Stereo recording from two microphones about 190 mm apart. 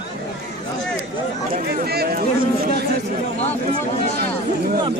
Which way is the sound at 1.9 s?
55° right (ahead or behind).